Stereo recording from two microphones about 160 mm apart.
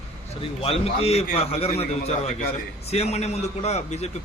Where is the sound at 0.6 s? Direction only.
40° left (ahead or behind).